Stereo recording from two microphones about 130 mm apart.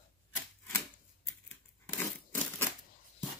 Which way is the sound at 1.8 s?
15° left (ahead or behind).